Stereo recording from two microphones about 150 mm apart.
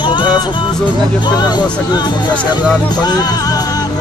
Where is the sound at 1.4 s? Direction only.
30° left (ahead or behind).